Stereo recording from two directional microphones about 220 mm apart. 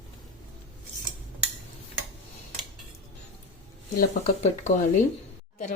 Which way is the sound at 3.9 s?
35° left (ahead or behind).